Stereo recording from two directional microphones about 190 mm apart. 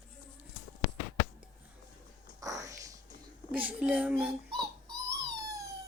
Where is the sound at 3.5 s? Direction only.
10° right (ahead or behind).